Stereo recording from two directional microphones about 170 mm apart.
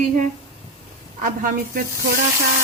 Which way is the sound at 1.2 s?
55° right (ahead or behind).